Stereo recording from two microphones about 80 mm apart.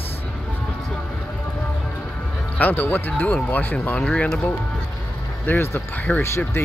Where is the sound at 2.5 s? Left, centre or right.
Left.